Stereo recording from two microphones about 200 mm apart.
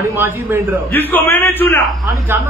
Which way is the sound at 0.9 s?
10° left (ahead or behind).